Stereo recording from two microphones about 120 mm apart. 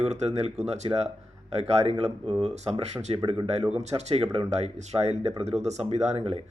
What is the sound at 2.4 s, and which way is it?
Speech, 65° right (ahead or behind).